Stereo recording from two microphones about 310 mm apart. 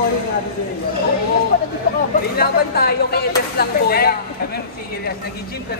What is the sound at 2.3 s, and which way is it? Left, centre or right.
Speech, left.